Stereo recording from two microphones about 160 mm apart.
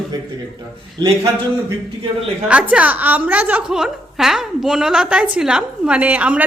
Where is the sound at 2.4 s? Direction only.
10° right (ahead or behind).